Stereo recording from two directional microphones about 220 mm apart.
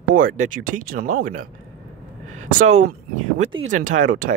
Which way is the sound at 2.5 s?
35° right (ahead or behind).